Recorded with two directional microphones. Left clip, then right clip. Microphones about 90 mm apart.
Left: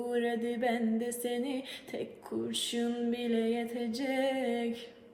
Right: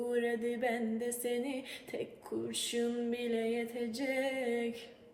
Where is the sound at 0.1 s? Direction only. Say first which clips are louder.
Left 2 dB; 20° left (ahead or behind).